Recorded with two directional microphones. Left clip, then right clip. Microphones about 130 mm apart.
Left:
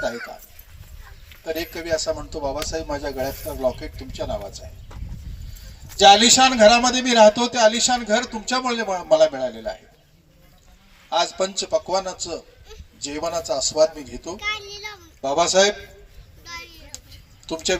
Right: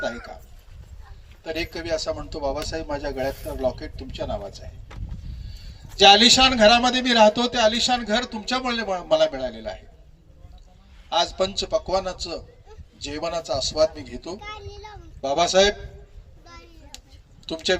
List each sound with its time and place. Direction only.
1.5 s speech: centre (ahead or behind)
6.0 s speech: centre (ahead or behind)
11.1 s speech: centre (ahead or behind)
14.3 s a child's voice: 90° right
15.2 s speech: centre (ahead or behind)
16.4 s a sound: 90° right